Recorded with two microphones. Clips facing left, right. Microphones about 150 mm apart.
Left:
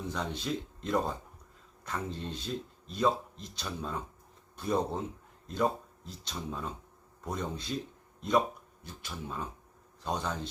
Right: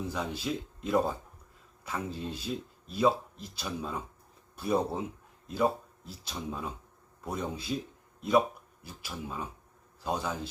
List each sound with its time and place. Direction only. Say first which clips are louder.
0.1 s speech: right 1 dB; 5° right (ahead or behind)
8.8 s speech: right 2 dB; 5° right (ahead or behind)